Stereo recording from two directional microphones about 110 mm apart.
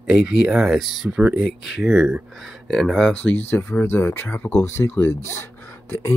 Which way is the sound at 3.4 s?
20° left (ahead or behind).